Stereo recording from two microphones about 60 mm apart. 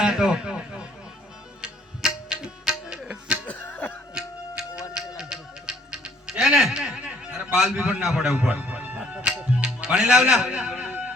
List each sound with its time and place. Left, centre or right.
0.0 s speech: centre
1.6 s music: centre
3.7 s cough: left
4.1 s tick-tock: centre
4.9 s music: centre
7.3 s a sound: centre
7.8 s a man's voice: right
8.0 s a man's voice: centre
8.4 s music: centre
9.6 s a man's voice: centre